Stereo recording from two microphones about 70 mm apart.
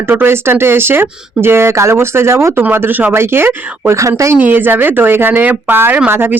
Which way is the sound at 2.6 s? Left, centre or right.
Right.